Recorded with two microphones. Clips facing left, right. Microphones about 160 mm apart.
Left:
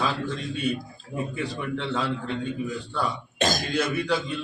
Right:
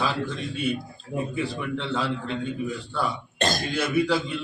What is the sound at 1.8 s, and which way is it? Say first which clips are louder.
Speech: even; centre (ahead or behind).